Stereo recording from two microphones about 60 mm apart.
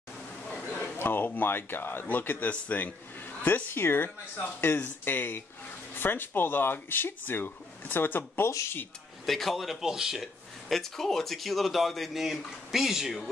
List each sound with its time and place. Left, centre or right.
0.7 s speech: left
9.2 s speech: centre